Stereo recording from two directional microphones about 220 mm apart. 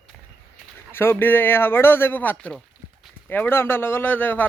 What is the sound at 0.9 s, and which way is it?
Speech, 10° left (ahead or behind).